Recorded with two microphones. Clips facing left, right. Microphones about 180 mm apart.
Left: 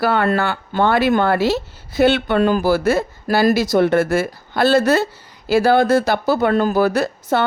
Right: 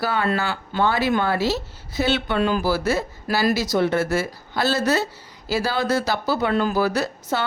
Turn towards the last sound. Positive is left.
turn(degrees=55)  # may be behind; listen again after turning